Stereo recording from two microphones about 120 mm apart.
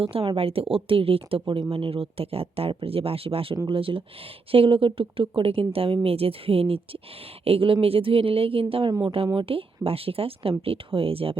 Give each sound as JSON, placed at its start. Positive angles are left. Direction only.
{"t": 0.0, "sound": "a woman's voice", "side_deg": -50}
{"t": 8.9, "sound": "speech", "side_deg": -35}
{"t": 9.1, "sound": "a woman's voice", "side_deg": -50}